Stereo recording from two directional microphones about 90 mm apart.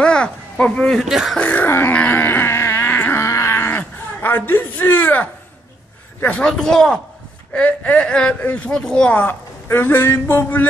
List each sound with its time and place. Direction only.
0.0 s a sound: 10° left (ahead or behind)
1.0 s speech: 5° right (ahead or behind)
1.4 s wail: 20° left (ahead or behind)
6.2 s speech: 10° left (ahead or behind)
7.5 s speech: 15° left (ahead or behind)
9.7 s music: 25° left (ahead or behind)